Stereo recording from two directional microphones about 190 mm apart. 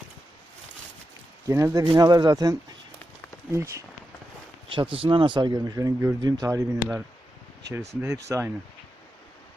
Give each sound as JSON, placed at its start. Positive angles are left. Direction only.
{"t": 1.5, "sound": "speech", "side_deg": -15}
{"t": 4.7, "sound": "speech", "side_deg": -25}
{"t": 8.3, "sound": "speech", "side_deg": -15}